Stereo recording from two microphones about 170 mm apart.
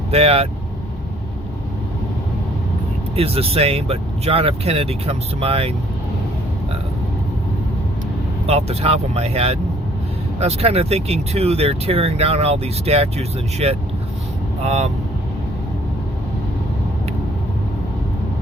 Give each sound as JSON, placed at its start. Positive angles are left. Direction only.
{"t": 0.1, "sound": "speech", "side_deg": -35}
{"t": 3.2, "sound": "speech", "side_deg": -35}
{"t": 8.4, "sound": "speech", "side_deg": -35}